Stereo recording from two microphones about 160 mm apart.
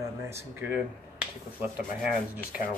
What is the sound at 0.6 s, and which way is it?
Speech, 5° right (ahead or behind).